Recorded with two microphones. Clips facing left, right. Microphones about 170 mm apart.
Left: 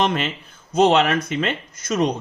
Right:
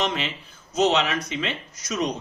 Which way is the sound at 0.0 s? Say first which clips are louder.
Left 5 dB; 50° left (ahead or behind).